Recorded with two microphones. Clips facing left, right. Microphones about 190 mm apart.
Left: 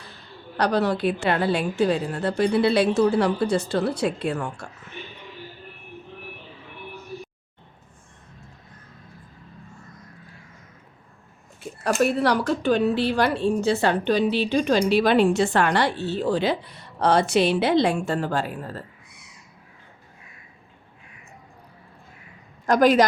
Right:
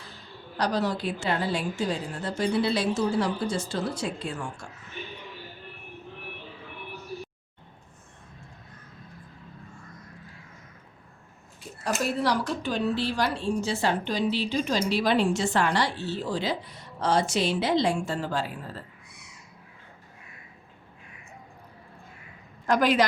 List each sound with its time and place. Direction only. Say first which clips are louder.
0.5 s speech: left 5 dB; 65° left (ahead or behind)
11.8 s speech: left 6 dB; 60° left (ahead or behind)
22.6 s a woman's voice: left 5 dB; 40° left (ahead or behind)